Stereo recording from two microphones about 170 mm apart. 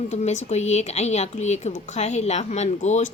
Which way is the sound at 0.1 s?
40° left (ahead or behind).